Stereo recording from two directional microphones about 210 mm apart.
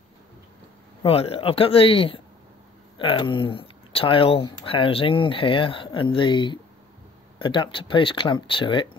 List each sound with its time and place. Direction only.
1.0 s speech: 25° left (ahead or behind)